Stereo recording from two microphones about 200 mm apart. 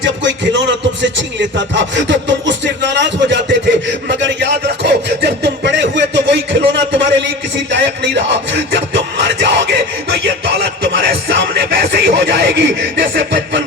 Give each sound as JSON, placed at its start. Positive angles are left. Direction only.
{"t": 0.0, "sound": "music", "side_deg": -65}